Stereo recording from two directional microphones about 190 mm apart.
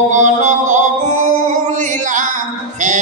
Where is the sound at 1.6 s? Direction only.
40° right (ahead or behind).